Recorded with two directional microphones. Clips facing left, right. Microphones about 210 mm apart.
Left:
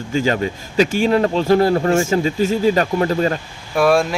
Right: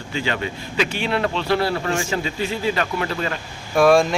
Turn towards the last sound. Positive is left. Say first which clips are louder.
# even
turn(degrees=5)  # may be behind; listen again after turning